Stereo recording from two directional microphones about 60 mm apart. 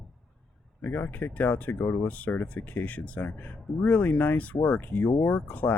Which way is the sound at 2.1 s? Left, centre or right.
Left.